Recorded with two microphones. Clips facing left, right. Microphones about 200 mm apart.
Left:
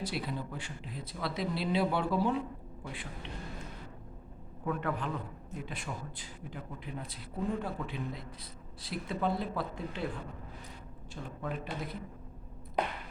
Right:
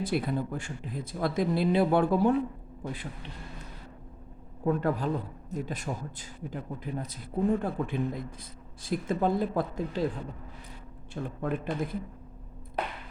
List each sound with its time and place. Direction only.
0.0 s speech: 55° right (ahead or behind)
2.8 s a man's voice: 40° right (ahead or behind)
4.6 s a man's voice: 35° right (ahead or behind)
11.1 s speech: 50° right (ahead or behind)